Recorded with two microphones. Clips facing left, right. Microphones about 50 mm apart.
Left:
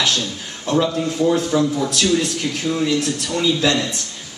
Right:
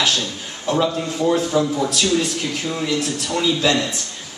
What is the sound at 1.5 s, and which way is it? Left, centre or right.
Speech, centre.